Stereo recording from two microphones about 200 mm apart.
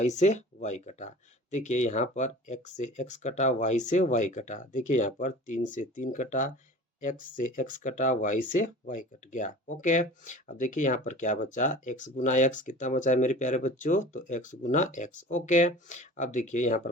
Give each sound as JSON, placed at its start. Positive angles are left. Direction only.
{"t": 0.0, "sound": "speech", "side_deg": 35}